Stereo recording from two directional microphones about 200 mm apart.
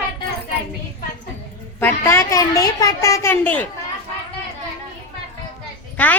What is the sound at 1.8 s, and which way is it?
A child's voice, 10° left (ahead or behind).